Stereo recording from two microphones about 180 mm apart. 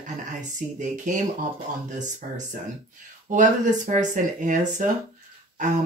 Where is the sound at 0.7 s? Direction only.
45° right (ahead or behind).